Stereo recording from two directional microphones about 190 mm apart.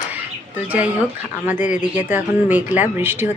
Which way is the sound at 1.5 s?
40° left (ahead or behind).